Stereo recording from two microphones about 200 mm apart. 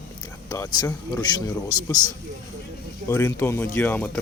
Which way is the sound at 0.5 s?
15° left (ahead or behind).